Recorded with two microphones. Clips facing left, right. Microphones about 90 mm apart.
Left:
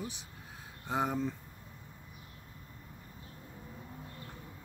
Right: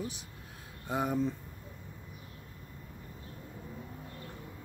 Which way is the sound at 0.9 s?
25° left (ahead or behind).